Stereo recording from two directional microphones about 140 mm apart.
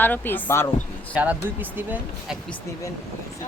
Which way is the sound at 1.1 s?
10° right (ahead or behind).